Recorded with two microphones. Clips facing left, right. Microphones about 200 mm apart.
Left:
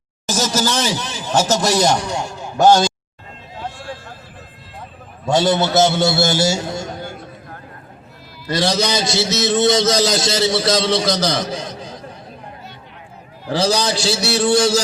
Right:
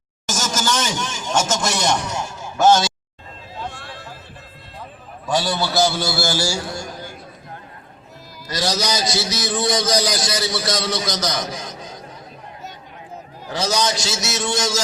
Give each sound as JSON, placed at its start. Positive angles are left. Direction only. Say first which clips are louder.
{"t": 0.3, "sound": "speech", "louder": "left 4 dB", "side_deg": 35}
{"t": 5.2, "sound": "a man's voice", "louder": "left 6 dB", "side_deg": 25}
{"t": 8.5, "sound": "a man's voice", "louder": "left 4 dB", "side_deg": 25}
{"t": 13.5, "sound": "a man's voice", "louder": "left 4 dB", "side_deg": 30}